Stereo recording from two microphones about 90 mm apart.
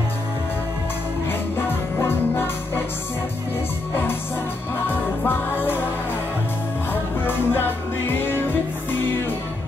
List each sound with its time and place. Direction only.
1.6 s music: 25° left (ahead or behind)
4.8 s music: 25° left (ahead or behind)
6.9 s music: 25° left (ahead or behind)